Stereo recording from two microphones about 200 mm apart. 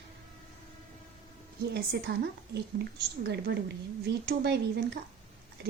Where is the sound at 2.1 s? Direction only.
55° right (ahead or behind).